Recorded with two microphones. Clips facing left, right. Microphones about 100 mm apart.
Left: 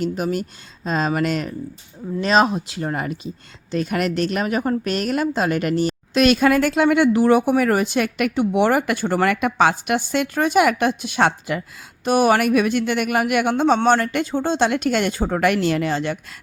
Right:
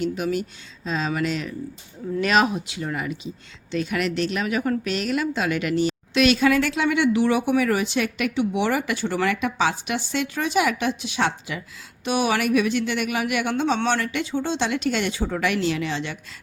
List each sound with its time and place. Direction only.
0.0 s a woman's voice: 45° left (ahead or behind)
2.2 s speech: 30° left (ahead or behind)
2.8 s a woman's voice: 45° left (ahead or behind)